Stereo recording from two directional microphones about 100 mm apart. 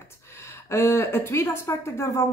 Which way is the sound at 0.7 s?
25° left (ahead or behind).